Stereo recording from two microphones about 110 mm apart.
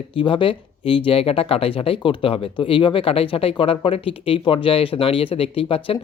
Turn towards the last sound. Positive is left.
turn(degrees=55)  # may be behind; listen again after turning